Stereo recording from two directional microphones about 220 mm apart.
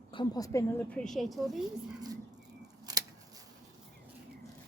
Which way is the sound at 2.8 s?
15° right (ahead or behind).